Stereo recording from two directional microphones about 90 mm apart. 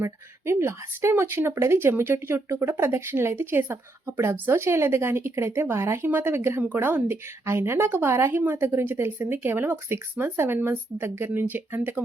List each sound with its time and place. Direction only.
0.0 s speech: 30° right (ahead or behind)